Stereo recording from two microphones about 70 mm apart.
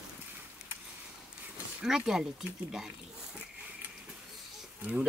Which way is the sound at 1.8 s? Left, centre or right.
Centre.